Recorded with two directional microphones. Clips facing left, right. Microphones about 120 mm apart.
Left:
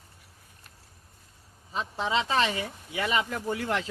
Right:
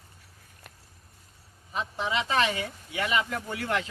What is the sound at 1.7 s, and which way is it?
Speech, 30° left (ahead or behind).